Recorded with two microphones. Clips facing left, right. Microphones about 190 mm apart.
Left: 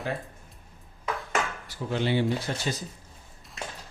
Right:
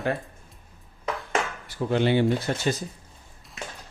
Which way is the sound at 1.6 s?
55° right (ahead or behind).